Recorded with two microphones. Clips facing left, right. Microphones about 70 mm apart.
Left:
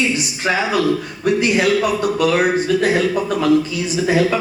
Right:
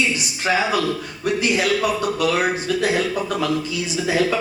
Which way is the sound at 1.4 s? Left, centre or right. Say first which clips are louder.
Left 3 dB; left.